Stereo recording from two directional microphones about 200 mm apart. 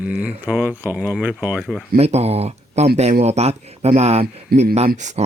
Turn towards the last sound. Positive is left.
turn(degrees=-35)  # may be behind; listen again after turning